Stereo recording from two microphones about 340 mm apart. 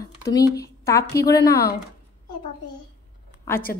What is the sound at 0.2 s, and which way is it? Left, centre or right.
Speech, centre.